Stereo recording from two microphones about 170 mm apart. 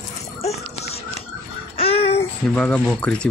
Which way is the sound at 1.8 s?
35° left (ahead or behind).